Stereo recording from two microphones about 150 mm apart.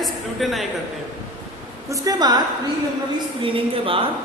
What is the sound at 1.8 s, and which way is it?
Speech, 25° right (ahead or behind).